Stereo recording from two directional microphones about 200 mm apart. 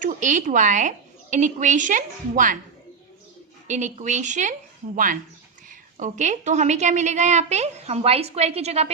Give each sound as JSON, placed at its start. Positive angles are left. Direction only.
{"t": 0.0, "sound": "a woman's voice", "side_deg": -40}
{"t": 3.7, "sound": "a woman's voice", "side_deg": -35}
{"t": 5.6, "sound": "a woman's voice", "side_deg": -40}